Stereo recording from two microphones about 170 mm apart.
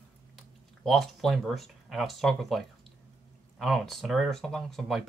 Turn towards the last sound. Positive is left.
turn(degrees=-5)  # may be behind; listen again after turning